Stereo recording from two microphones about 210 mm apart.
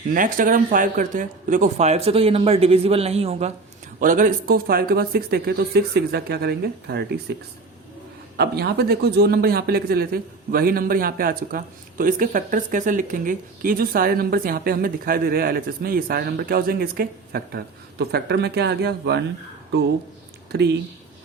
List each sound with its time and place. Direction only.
0.1 s a man's voice: 40° right (ahead or behind)
20.5 s a man's voice: 50° right (ahead or behind)